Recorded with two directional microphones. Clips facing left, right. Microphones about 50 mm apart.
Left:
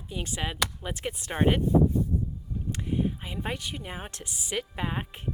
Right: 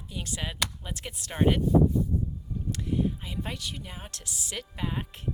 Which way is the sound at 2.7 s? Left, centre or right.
Left.